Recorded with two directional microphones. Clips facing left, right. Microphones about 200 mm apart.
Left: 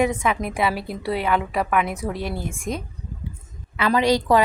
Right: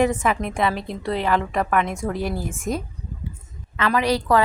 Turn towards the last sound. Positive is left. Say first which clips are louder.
# left 2 dB
turn(degrees=15)  # may be behind; listen again after turning